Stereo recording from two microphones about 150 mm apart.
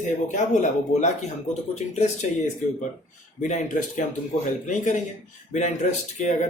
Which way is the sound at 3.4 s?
55° left (ahead or behind).